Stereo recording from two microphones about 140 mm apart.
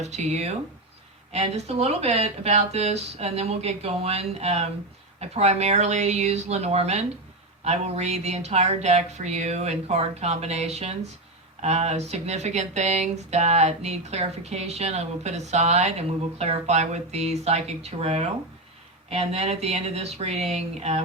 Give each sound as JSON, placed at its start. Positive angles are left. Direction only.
{"t": 0.0, "sound": "speech", "side_deg": -55}